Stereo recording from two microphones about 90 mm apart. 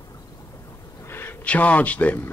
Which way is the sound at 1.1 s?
25° left (ahead or behind).